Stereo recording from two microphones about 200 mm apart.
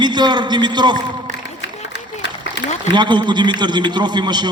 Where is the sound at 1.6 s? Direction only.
60° left (ahead or behind).